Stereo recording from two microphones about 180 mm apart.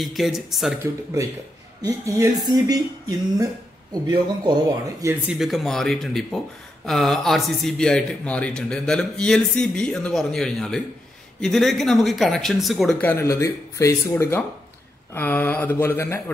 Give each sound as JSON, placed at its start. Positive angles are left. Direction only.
{"t": 0.0, "sound": "speech", "side_deg": 0}
{"t": 1.8, "sound": "speech", "side_deg": -20}
{"t": 5.3, "sound": "speech", "side_deg": 0}
{"t": 13.1, "sound": "speech", "side_deg": 15}